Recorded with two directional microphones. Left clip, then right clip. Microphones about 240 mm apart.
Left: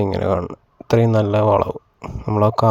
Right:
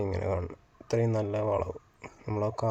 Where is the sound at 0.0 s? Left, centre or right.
Left.